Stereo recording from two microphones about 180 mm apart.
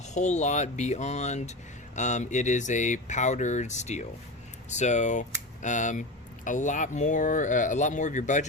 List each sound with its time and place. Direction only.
0.0 s speech: 40° left (ahead or behind)